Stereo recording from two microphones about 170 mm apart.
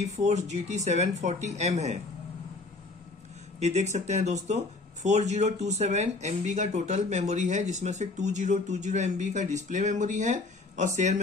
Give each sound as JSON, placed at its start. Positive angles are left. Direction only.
{"t": 0.0, "sound": "speech", "side_deg": -45}
{"t": 3.6, "sound": "speech", "side_deg": -40}